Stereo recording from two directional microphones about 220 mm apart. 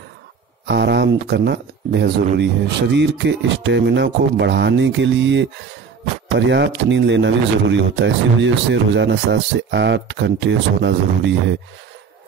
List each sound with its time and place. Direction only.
0.7 s speech: 50° right (ahead or behind)